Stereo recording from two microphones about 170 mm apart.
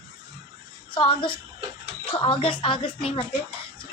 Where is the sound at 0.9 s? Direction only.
30° left (ahead or behind).